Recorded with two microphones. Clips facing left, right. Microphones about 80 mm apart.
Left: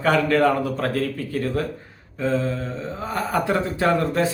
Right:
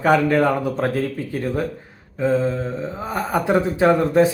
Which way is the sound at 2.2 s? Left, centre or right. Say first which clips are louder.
Right 4 dB; right.